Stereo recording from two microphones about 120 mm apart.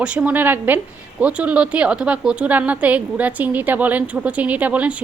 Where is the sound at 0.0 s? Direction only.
10° right (ahead or behind).